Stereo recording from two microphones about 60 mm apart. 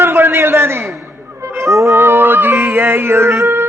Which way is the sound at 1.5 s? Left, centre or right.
Right.